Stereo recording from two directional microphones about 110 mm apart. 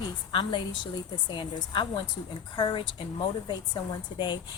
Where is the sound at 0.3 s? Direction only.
45° left (ahead or behind).